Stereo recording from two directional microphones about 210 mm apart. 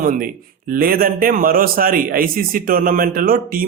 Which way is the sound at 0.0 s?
40° right (ahead or behind).